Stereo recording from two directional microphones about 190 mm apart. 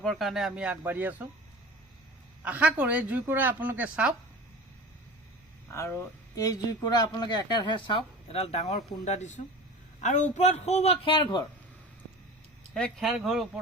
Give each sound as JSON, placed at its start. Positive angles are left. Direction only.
{"t": 0.0, "sound": "speech", "side_deg": 0}
{"t": 2.4, "sound": "speech", "side_deg": -5}
{"t": 5.7, "sound": "a man's voice", "side_deg": 15}
{"t": 12.7, "sound": "speech", "side_deg": 0}